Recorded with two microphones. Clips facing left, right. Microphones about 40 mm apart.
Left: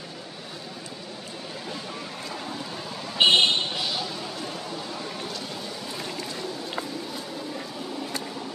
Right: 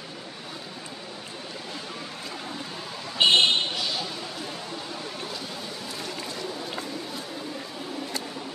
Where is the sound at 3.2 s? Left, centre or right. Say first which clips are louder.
Left 1 dB; centre.